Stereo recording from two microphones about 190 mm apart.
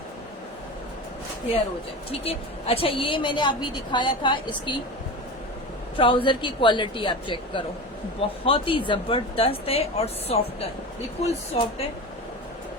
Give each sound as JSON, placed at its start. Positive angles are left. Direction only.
{"t": 2.0, "sound": "a woman's voice", "side_deg": 30}
{"t": 6.0, "sound": "a woman's voice", "side_deg": 25}